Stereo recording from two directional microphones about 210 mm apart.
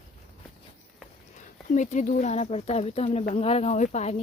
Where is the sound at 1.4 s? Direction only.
35° left (ahead or behind).